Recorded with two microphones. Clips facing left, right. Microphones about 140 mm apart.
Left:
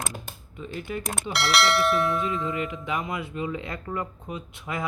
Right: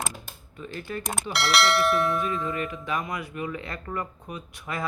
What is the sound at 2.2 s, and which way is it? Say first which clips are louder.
Speech: left 1 dB; 20° left (ahead or behind).